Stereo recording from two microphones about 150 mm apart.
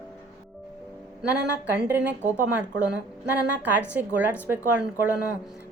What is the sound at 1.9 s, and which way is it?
A woman's voice, 10° right (ahead or behind).